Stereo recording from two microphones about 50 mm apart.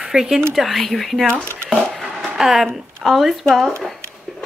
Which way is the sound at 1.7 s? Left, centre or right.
Right.